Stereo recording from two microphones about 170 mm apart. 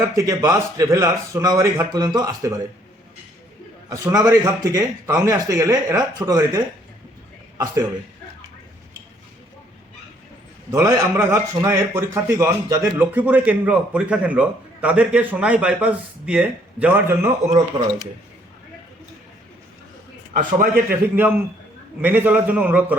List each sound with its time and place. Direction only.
0.2 s a man's voice: 20° right (ahead or behind)
3.8 s a man's voice: 20° right (ahead or behind)
7.6 s a man's voice: 15° right (ahead or behind)
10.7 s a man's voice: 15° right (ahead or behind)
20.7 s a man's voice: 10° right (ahead or behind)